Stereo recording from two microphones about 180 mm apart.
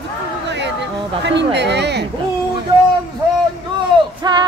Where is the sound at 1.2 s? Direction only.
75° right (ahead or behind).